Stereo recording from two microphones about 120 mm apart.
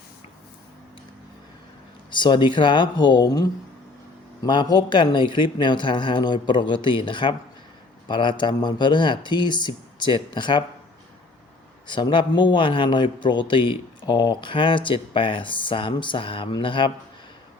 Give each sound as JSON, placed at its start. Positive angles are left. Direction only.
{"t": 2.0, "sound": "speech", "side_deg": 40}
{"t": 11.9, "sound": "a man's voice", "side_deg": 40}